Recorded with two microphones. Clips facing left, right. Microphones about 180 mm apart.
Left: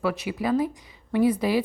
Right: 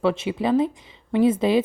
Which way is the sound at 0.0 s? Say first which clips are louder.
Right 4 dB; 25° right (ahead or behind).